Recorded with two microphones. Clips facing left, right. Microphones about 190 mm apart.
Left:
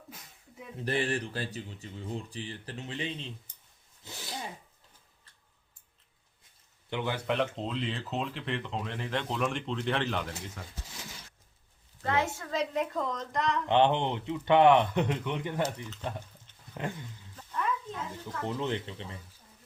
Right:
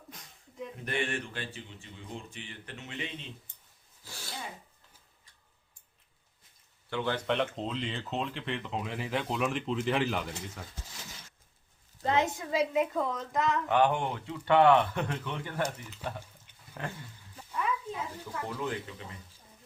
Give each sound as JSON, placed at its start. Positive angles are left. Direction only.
{"t": 0.1, "sound": "a sound", "side_deg": 5}
{"t": 0.9, "sound": "speech", "side_deg": 35}
{"t": 4.0, "sound": "filing", "side_deg": 20}
{"t": 6.9, "sound": "speech", "side_deg": 15}
{"t": 7.3, "sound": "speech", "side_deg": 0}
{"t": 12.0, "sound": "a woman's voice", "side_deg": -20}
{"t": 13.7, "sound": "speech", "side_deg": 25}
{"t": 15.6, "sound": "speech", "side_deg": -10}
{"t": 17.3, "sound": "a sound", "side_deg": -10}
{"t": 18.4, "sound": "speech", "side_deg": 25}